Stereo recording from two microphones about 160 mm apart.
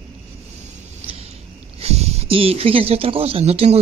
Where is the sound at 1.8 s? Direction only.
40° right (ahead or behind).